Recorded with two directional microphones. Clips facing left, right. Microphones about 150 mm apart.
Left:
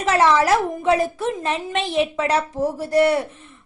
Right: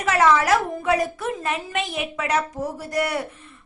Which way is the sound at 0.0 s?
30° left (ahead or behind).